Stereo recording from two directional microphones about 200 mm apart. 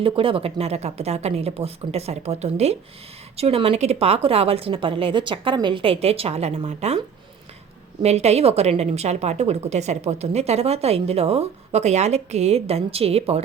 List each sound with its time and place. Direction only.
0.0 s a woman's voice: 25° right (ahead or behind)
8.0 s a woman's voice: 30° right (ahead or behind)